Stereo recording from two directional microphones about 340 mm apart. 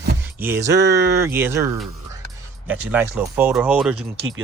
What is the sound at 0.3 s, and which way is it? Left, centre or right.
Speech, centre.